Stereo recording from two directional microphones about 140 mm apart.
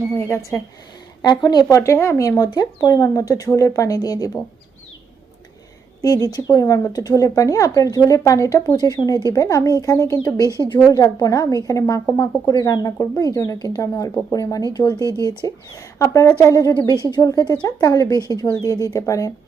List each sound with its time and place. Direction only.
0.2 s speech: 20° left (ahead or behind)
1.2 s speech: 30° left (ahead or behind)
6.0 s speech: 25° left (ahead or behind)